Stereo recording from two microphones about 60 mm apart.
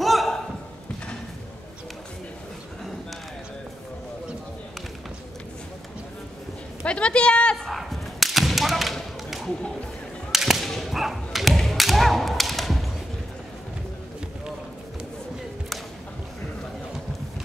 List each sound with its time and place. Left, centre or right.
0.0 s a sound: centre
6.9 s speech: centre
7.5 s thump: centre
10.3 s whip: centre